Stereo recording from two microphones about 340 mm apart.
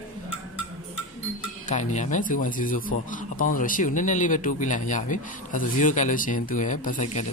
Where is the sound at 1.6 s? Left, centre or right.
Left.